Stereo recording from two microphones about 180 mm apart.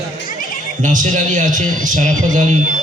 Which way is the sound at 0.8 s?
45° right (ahead or behind).